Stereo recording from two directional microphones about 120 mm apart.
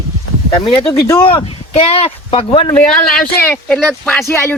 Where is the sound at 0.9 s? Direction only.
25° left (ahead or behind).